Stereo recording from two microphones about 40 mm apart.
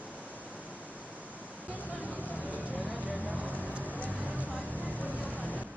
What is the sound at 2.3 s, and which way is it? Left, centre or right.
Vehicle, right.